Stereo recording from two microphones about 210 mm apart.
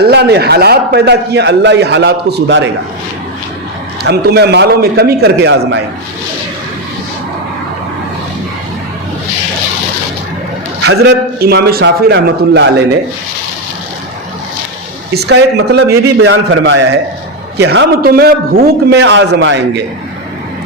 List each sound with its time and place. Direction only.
0.0 s a man's voice: 50° right (ahead or behind)
4.0 s a man's voice: 50° right (ahead or behind)
10.8 s a man's voice: 50° right (ahead or behind)
15.1 s a man's voice: 50° right (ahead or behind)
16.2 s a man's voice: 75° right (ahead or behind)
17.6 s a man's voice: 50° right (ahead or behind)